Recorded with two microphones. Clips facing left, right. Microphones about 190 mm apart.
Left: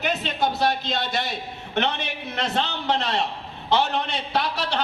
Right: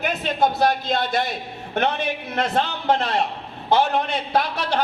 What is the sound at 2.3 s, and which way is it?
A man's voice, 50° right (ahead or behind).